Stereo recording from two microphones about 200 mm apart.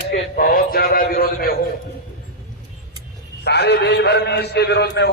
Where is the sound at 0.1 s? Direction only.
45° left (ahead or behind).